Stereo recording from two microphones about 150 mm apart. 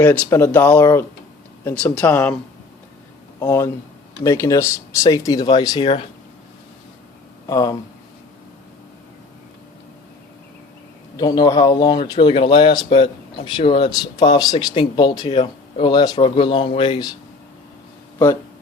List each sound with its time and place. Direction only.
0.0 s speech: 10° left (ahead or behind)
3.4 s speech: 20° left (ahead or behind); by 6.1 s 35° left (ahead or behind)
7.4 s speech: 25° left (ahead or behind)
11.2 s speech: 25° left (ahead or behind)